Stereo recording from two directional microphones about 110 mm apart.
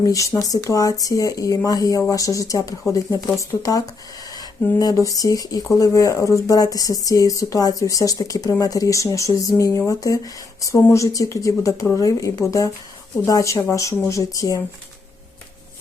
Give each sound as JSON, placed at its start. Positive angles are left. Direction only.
{"t": 0.0, "sound": "speech", "side_deg": 30}